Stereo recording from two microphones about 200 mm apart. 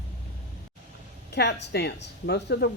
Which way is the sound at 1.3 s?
55° left (ahead or behind).